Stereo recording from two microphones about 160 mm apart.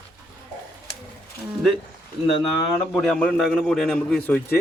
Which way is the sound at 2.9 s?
5° left (ahead or behind).